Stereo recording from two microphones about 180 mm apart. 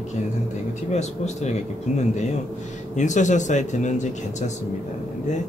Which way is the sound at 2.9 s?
45° left (ahead or behind).